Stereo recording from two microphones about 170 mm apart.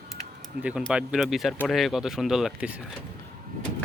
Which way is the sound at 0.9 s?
5° right (ahead or behind).